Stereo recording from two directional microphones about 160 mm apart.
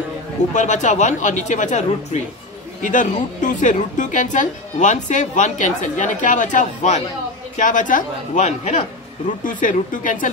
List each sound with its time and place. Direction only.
0.5 s a woman's voice: 50° left (ahead or behind)